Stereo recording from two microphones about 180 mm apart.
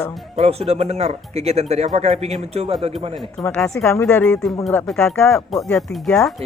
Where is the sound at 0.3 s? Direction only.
35° right (ahead or behind).